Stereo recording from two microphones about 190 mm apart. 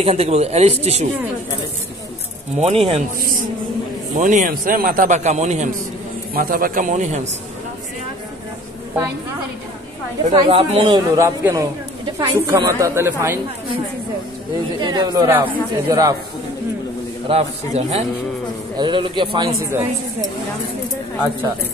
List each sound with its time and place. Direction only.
0.0 s a man's voice: 35° right (ahead or behind)
2.5 s a man's voice: 35° right (ahead or behind)
4.2 s a man's voice: 45° right (ahead or behind)
6.3 s a man's voice: 50° right (ahead or behind)
10.3 s speech: 25° right (ahead or behind)
11.1 s a woman's voice: 15° right (ahead or behind)
14.8 s speech: 20° right (ahead or behind)
17.3 s a man's voice: 30° right (ahead or behind)